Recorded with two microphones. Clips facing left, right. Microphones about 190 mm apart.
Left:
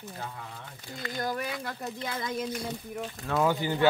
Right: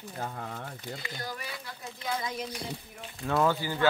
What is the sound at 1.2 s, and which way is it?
Speech, 50° left (ahead or behind).